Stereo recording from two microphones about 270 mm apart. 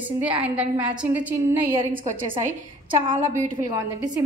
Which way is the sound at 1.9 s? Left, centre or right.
Right.